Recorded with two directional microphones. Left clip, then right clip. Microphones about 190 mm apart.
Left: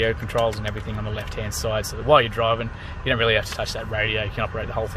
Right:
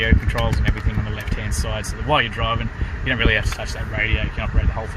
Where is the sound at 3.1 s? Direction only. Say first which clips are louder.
Even; 15° left (ahead or behind).